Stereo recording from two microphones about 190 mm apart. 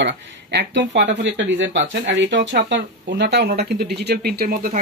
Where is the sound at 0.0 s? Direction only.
65° right (ahead or behind).